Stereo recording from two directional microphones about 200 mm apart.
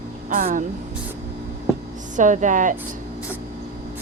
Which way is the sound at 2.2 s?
40° right (ahead or behind).